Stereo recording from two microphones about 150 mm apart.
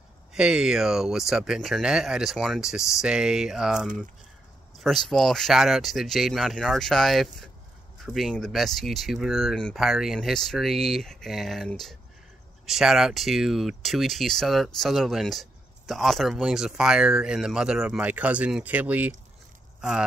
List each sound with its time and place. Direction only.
0.3 s speech: 5° right (ahead or behind)